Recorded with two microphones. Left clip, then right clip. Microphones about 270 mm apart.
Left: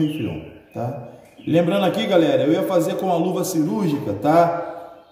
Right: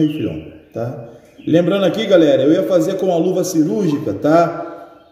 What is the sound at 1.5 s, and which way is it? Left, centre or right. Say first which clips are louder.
A man's voice: right 4 dB; centre.